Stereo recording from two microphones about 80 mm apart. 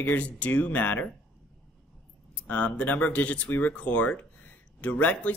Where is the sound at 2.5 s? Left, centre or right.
Centre.